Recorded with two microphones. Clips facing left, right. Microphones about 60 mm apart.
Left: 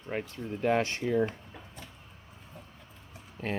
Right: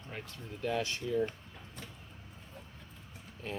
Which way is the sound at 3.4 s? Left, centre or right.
Left.